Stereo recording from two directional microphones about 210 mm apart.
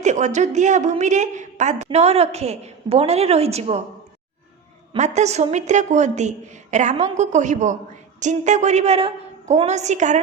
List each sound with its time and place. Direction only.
0.0 s a woman's voice: 35° right (ahead or behind)
4.9 s a woman's voice: 35° right (ahead or behind)